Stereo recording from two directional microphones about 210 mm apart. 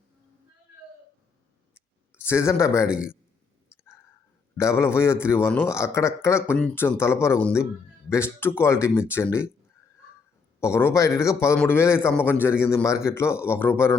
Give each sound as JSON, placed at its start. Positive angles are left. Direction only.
{"t": 2.1, "sound": "speech", "side_deg": 10}
{"t": 2.8, "sound": "a man's voice", "side_deg": -5}
{"t": 4.5, "sound": "a man's voice", "side_deg": 10}
{"t": 10.6, "sound": "a man's voice", "side_deg": 10}